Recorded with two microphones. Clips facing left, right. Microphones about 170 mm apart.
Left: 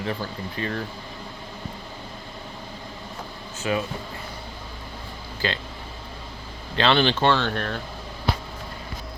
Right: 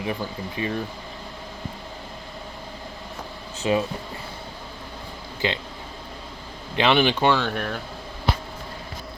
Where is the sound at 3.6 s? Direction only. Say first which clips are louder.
Right 3 dB; 25° right (ahead or behind).